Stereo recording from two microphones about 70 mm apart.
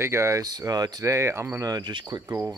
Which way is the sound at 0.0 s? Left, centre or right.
Right.